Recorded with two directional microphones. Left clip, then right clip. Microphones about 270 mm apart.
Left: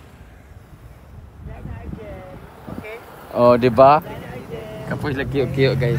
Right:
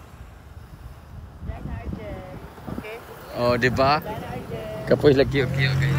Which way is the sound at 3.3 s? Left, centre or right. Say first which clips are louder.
Left 8 dB; centre.